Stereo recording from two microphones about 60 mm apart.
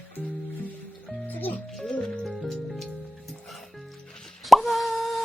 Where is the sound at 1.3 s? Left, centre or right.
Left.